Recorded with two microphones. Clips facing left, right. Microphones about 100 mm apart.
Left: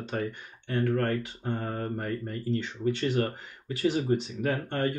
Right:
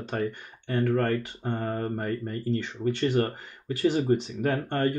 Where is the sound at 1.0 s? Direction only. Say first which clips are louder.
Right 2 dB; 45° right (ahead or behind).